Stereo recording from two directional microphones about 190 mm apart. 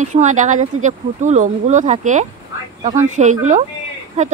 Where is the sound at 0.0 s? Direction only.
40° right (ahead or behind).